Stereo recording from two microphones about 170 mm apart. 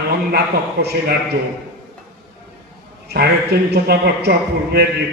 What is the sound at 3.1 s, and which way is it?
A man's voice, 75° right (ahead or behind).